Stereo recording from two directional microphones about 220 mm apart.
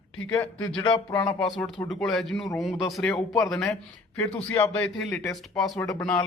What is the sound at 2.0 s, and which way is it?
Speech, centre (ahead or behind).